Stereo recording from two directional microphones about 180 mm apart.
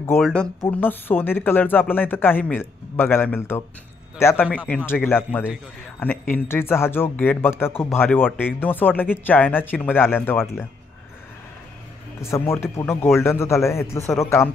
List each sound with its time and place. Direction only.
0.2 s speech: 5° left (ahead or behind)
12.2 s speech: 15° left (ahead or behind)